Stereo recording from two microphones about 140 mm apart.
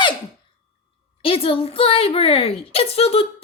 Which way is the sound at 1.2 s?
40° left (ahead or behind).